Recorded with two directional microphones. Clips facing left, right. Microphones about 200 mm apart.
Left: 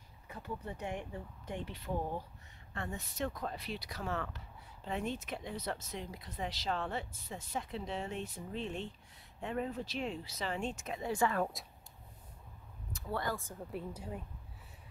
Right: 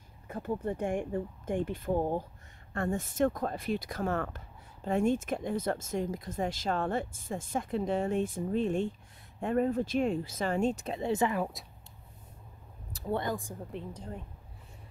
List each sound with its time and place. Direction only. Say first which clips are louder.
0.3 s speech: right 10 dB; 50° right (ahead or behind); by 11.3 s 25° right (ahead or behind)
11.3 s speech: right 2 dB; 5° right (ahead or behind)
13.1 s speech: right 5 dB; 20° right (ahead or behind)
13.7 s a woman's voice: left 2 dB; 5° left (ahead or behind)